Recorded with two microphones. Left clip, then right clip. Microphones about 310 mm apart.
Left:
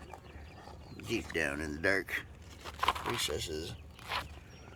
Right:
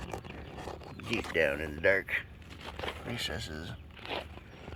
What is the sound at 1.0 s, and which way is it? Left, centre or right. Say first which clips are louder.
Speech: right 5 dB; centre.